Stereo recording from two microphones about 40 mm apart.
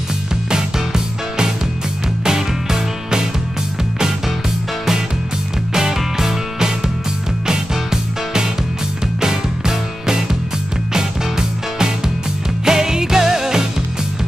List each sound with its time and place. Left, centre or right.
0.5 s music: centre
5.7 s music: centre